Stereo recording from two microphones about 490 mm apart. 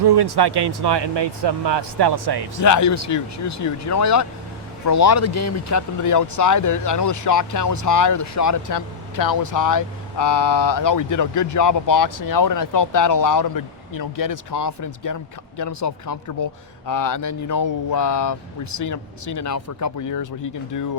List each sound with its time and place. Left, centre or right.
0.0 s speech: right
2.6 s speech: left